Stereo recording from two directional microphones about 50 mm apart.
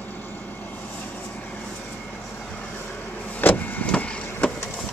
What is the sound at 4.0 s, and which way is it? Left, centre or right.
Vehicle, left.